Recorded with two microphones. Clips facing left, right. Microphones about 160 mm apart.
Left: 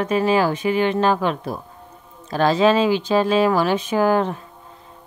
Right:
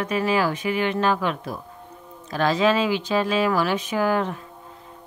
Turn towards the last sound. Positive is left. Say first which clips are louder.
# left 4 dB
turn(degrees=30)  # may be behind; listen again after turning